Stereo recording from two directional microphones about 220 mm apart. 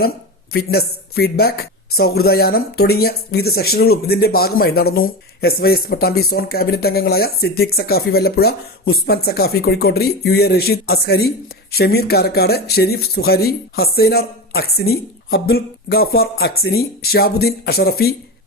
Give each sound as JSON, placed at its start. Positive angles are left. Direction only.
{"t": 0.5, "sound": "speech", "side_deg": 45}